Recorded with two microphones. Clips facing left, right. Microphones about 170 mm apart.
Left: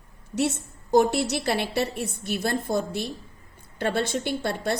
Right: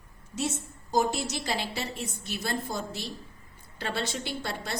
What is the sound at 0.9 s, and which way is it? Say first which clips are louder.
A woman's voice: left 7 dB; 65° left (ahead or behind).